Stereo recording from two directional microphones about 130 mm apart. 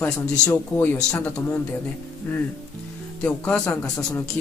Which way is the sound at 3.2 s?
5° left (ahead or behind).